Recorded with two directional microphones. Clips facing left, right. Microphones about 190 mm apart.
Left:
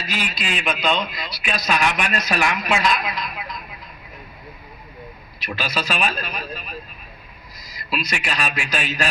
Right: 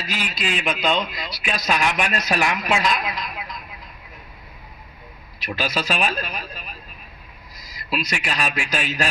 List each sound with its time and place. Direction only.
0.0 s a man's voice: 45° right (ahead or behind)
5.4 s a man's voice: 45° right (ahead or behind)
7.9 s a man's voice: 45° right (ahead or behind)